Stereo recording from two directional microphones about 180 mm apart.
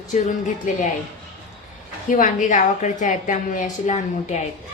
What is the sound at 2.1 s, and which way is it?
A woman's voice, 45° left (ahead or behind).